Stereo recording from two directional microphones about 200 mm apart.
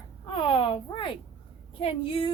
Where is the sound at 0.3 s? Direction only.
25° left (ahead or behind).